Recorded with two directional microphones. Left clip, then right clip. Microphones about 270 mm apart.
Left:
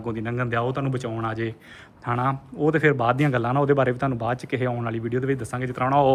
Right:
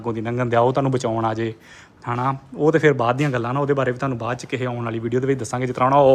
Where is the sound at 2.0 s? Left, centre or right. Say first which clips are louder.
Right 2 dB; centre.